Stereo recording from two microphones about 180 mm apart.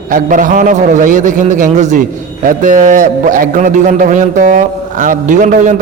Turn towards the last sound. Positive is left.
turn(degrees=-45)  # may be behind; listen again after turning